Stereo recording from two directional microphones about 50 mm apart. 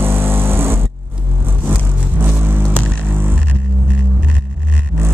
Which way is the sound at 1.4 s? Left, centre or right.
Right.